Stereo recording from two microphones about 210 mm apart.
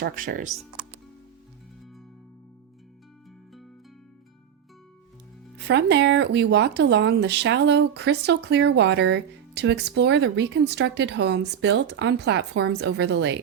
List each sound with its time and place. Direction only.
0.0 s speech: 45° right (ahead or behind)
5.6 s speech: 55° right (ahead or behind)